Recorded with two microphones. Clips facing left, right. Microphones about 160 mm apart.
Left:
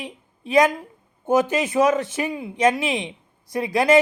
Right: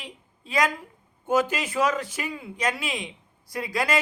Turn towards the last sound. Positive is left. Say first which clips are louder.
# left 9 dB
turn(degrees=20)  # may be behind; listen again after turning